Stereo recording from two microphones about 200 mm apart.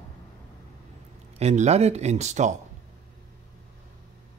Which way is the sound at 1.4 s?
35° right (ahead or behind).